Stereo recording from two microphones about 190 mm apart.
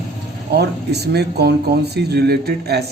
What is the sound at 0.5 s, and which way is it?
Speech, 60° right (ahead or behind).